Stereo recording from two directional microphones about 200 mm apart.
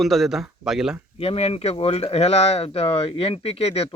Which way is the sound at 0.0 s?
Centre (ahead or behind).